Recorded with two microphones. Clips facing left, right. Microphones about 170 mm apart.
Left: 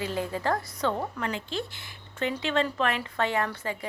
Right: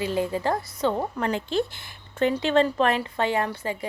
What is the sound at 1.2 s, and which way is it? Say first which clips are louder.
Speech: right 7 dB; 40° right (ahead or behind).